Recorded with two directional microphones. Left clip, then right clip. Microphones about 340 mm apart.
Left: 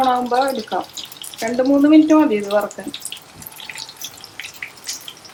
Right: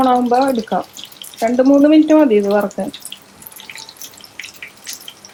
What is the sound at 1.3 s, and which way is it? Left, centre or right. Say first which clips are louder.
Drip: right 7 dB; centre.